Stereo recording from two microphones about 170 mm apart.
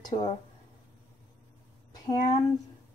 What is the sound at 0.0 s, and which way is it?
Speech, 30° left (ahead or behind).